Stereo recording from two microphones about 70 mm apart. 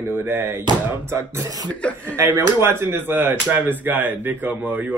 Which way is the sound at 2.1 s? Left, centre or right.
Right.